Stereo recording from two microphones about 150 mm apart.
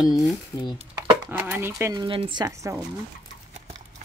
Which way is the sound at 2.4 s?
20° right (ahead or behind).